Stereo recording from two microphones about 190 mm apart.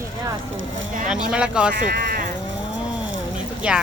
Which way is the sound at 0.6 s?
90° right.